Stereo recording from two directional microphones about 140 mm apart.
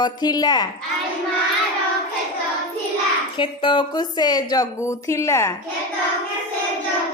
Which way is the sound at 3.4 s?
35° left (ahead or behind).